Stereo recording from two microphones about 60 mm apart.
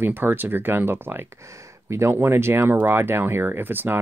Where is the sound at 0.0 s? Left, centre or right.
Right.